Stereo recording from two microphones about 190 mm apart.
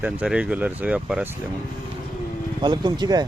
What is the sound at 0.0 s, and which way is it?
Speech, 5° right (ahead or behind).